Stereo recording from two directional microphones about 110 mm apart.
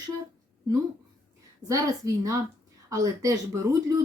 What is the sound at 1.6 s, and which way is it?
Speech, 30° right (ahead or behind).